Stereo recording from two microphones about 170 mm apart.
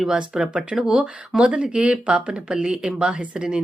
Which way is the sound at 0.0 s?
5° right (ahead or behind).